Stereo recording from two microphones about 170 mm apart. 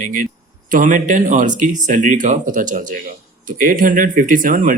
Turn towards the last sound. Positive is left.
turn(degrees=-55)  # may be behind; listen again after turning